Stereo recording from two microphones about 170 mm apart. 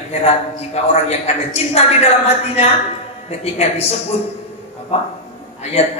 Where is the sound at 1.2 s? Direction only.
40° left (ahead or behind).